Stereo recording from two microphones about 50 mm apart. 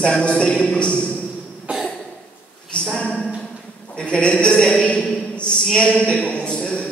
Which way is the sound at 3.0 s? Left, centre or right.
Left.